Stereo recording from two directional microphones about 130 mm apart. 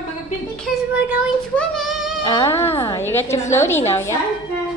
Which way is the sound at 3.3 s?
60° left (ahead or behind).